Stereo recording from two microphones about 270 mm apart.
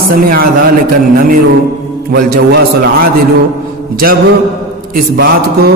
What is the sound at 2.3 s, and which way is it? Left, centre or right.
Mantra, right.